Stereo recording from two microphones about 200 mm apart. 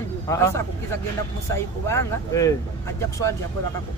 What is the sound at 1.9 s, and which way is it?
Speech, 15° left (ahead or behind).